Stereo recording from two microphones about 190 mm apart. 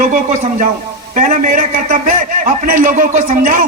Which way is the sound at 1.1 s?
45° right (ahead or behind).